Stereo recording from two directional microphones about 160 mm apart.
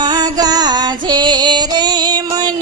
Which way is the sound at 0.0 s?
25° right (ahead or behind).